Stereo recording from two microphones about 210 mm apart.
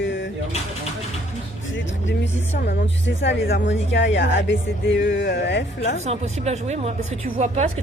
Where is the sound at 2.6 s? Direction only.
50° left (ahead or behind).